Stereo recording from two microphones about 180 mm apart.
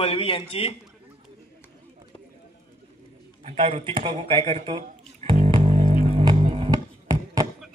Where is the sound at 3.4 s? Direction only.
30° right (ahead or behind).